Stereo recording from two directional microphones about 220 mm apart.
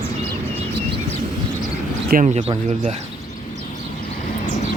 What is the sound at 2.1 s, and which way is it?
Speech, 30° right (ahead or behind).